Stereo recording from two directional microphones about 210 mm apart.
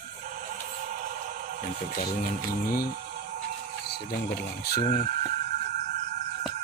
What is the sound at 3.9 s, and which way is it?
Speech, 45° left (ahead or behind).